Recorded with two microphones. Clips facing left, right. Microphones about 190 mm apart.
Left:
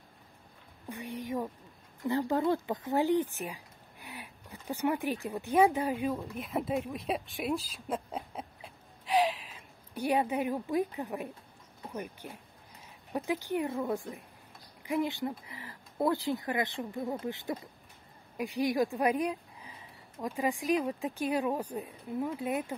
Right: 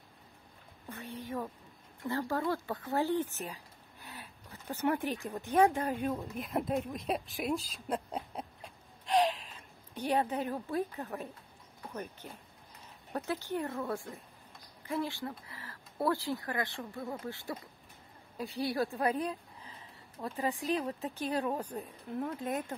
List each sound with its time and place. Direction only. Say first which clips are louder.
0.8 s speech: left 4 dB; 15° left (ahead or behind)